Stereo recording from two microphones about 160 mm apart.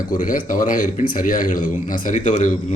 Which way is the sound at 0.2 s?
55° left (ahead or behind).